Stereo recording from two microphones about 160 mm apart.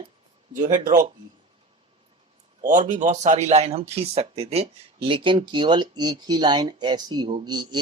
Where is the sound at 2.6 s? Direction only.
55° right (ahead or behind).